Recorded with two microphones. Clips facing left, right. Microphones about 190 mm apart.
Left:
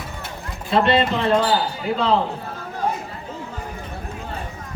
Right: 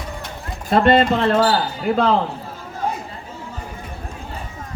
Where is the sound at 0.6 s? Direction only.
45° right (ahead or behind).